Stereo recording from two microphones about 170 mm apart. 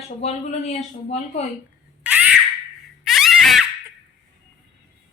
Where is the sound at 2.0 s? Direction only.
5° right (ahead or behind).